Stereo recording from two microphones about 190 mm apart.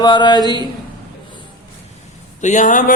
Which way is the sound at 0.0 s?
25° left (ahead or behind).